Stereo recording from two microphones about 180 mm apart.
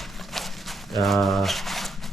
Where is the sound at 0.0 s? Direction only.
Centre (ahead or behind).